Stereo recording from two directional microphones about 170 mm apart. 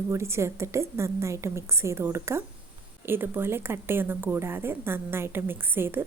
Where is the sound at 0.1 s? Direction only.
15° right (ahead or behind).